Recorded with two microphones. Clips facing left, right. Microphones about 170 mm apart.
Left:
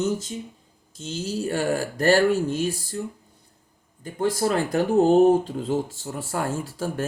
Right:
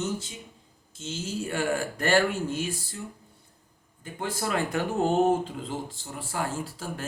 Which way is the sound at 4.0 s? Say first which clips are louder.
Left 9 dB; 40° left (ahead or behind).